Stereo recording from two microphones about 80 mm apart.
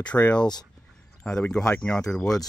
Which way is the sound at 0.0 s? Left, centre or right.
Centre.